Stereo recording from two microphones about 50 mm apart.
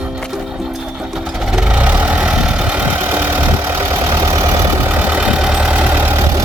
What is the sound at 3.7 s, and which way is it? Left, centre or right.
Vehicle, right.